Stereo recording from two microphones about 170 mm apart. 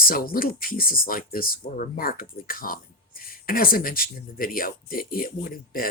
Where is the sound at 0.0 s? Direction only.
60° left (ahead or behind).